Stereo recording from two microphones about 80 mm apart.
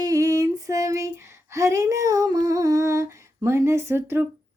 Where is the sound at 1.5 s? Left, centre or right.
Right.